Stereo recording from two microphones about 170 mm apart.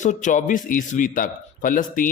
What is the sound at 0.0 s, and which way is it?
A man's voice, 45° left (ahead or behind).